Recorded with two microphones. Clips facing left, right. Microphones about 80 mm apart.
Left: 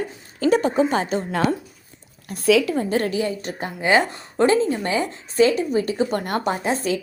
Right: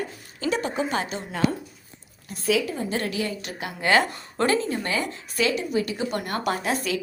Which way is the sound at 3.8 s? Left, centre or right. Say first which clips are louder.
Left 2 dB; centre.